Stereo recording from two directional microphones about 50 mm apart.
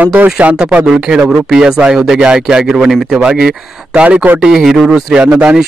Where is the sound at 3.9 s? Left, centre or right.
Right.